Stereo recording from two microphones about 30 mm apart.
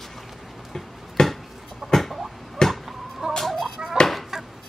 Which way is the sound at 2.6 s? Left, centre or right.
Left.